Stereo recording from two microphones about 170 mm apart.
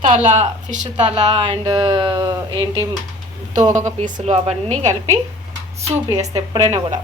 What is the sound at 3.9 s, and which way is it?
Speech, 45° right (ahead or behind).